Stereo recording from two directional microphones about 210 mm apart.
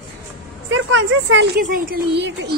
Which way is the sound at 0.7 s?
60° right (ahead or behind).